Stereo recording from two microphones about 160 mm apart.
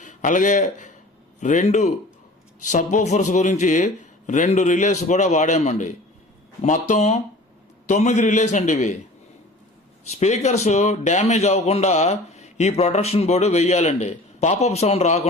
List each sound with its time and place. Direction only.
0.0 s a man's voice: 50° left (ahead or behind)
10.1 s a man's voice: 45° left (ahead or behind)